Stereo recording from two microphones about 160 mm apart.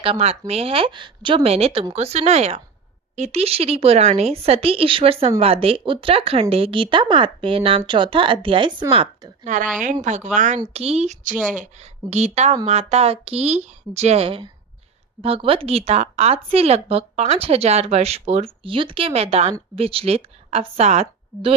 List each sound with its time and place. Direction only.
0.0 s speech: 40° right (ahead or behind)
9.4 s a woman's voice: 50° right (ahead or behind)